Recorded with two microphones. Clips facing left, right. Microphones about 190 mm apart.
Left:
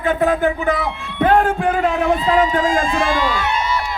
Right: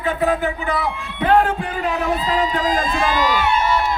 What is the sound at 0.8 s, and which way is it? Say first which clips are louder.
Speech: even; 50° right (ahead or behind).